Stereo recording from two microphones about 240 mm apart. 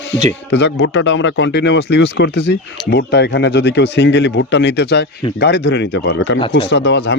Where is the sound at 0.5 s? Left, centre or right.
Left.